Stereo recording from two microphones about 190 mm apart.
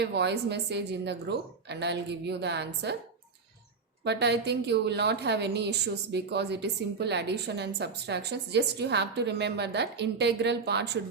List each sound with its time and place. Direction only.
0.0 s a woman's voice: 60° right (ahead or behind)
4.0 s a woman's voice: 60° right (ahead or behind)